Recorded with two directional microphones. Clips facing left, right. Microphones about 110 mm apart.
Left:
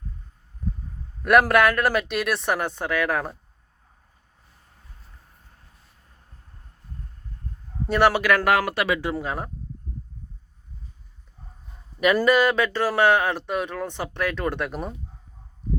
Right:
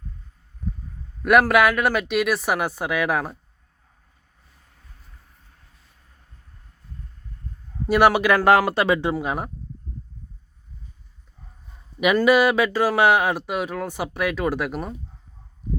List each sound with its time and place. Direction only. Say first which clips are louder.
1.2 s speech: right 1 dB; centre (ahead or behind)
7.9 s speech: right 2 dB; 15° right (ahead or behind)
8.4 s speech: right 4 dB; 30° right (ahead or behind)
9.2 s speech: right 3 dB; 15° right (ahead or behind)
12.2 s speech: right 4 dB; 10° right (ahead or behind)